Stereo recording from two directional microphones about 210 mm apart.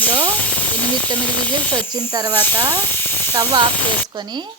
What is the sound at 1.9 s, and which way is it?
A woman's voice, 20° right (ahead or behind).